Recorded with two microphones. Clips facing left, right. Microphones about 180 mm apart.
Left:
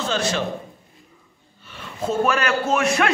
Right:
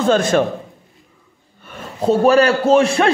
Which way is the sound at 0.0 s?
50° right (ahead or behind).